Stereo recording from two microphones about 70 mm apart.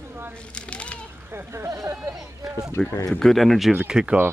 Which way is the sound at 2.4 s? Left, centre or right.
Centre.